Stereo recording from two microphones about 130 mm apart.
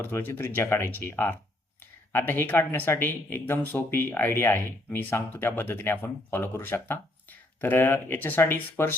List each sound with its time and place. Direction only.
0.0 s speech: 15° left (ahead or behind)